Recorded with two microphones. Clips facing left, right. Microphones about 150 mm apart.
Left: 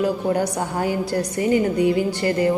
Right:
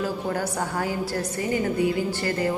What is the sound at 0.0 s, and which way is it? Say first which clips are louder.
Speech: left 6 dB; 20° left (ahead or behind).